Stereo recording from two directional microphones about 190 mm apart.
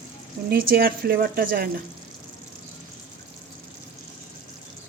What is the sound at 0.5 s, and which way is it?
A woman's voice, 50° right (ahead or behind).